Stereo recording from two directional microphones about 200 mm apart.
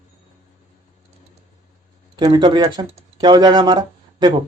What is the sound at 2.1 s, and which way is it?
Speech, 20° right (ahead or behind).